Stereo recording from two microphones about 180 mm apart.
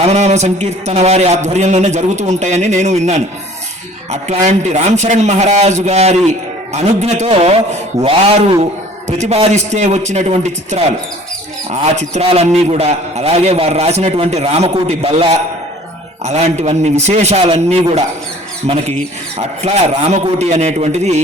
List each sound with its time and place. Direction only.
0.0 s a man's voice: 35° right (ahead or behind)